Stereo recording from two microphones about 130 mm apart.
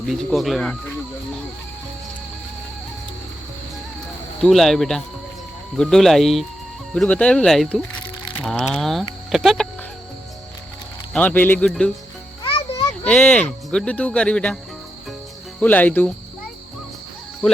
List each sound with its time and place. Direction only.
0.0 s speech: centre (ahead or behind)
4.4 s speech: centre (ahead or behind)
11.1 s speech: 10° left (ahead or behind)
12.4 s music: 45° left (ahead or behind)
13.1 s speech: 10° left (ahead or behind)
15.6 s speech: 15° left (ahead or behind)